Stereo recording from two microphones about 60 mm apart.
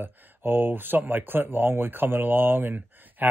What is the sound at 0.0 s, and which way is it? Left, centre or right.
Speech, right.